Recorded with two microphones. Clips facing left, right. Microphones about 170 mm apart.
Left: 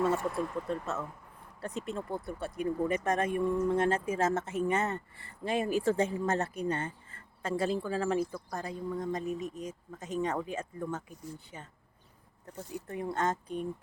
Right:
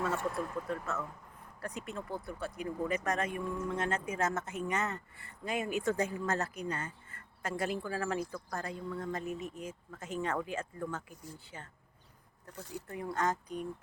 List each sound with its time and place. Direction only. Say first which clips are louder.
0.2 s speech: left 2 dB; centre (ahead or behind)
0.7 s a man's voice: left 2 dB; 25° left (ahead or behind)
12.5 s speech: left 4 dB; 20° left (ahead or behind)